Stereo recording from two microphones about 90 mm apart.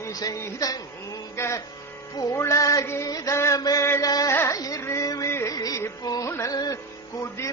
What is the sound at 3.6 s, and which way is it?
Mantra, 45° left (ahead or behind).